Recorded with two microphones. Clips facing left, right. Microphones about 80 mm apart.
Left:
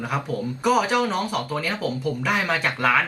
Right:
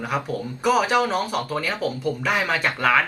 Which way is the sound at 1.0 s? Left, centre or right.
Centre.